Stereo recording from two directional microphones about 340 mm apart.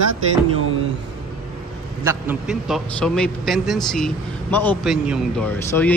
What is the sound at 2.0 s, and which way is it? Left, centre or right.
A man's voice, centre.